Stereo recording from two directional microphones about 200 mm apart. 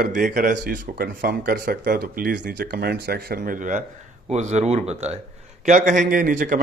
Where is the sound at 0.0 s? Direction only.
40° right (ahead or behind).